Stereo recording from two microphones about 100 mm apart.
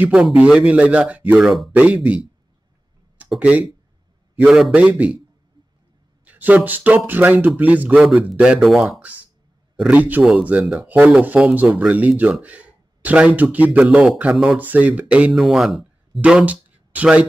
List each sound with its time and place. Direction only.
0.0 s speech: 10° right (ahead or behind)
1.4 s speech: centre (ahead or behind)
3.3 s speech: 15° right (ahead or behind)
4.5 s speech: centre (ahead or behind)
4.7 s speech: 15° right (ahead or behind)
6.2 s speech: 15° right (ahead or behind); by 9.0 s centre (ahead or behind)
9.8 s speech: 15° right (ahead or behind)
14.3 s speech: centre (ahead or behind)
14.6 s speech: 15° right (ahead or behind)
15.3 s speech: centre (ahead or behind)
16.2 s speech: 15° right (ahead or behind)